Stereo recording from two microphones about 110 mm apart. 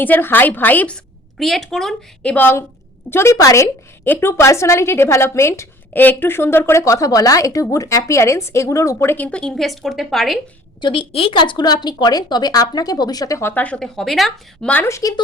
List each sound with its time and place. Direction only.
0.0 s a woman's voice: 20° left (ahead or behind)
1.4 s a woman's voice: centre (ahead or behind)
2.3 s a woman's voice: 20° left (ahead or behind); by 10.4 s centre (ahead or behind)
10.8 s speech: 50° left (ahead or behind); by 13.5 s 30° left (ahead or behind)
13.5 s a woman's voice: 15° left (ahead or behind)
14.8 s a woman's voice: 30° left (ahead or behind)